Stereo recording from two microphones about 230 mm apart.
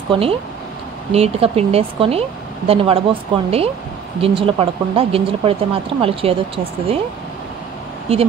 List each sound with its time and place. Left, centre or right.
0.1 s speech: right
8.1 s speech: right